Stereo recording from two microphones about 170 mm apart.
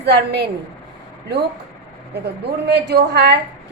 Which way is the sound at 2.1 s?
75° right (ahead or behind).